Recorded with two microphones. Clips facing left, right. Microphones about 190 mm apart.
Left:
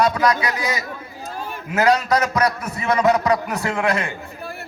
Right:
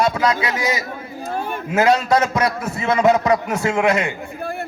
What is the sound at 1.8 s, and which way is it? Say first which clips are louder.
A man's voice: right 2 dB; 25° right (ahead or behind).